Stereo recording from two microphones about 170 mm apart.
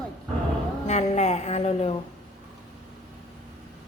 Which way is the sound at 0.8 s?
40° left (ahead or behind).